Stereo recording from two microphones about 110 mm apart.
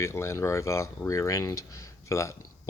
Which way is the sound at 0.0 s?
25° left (ahead or behind).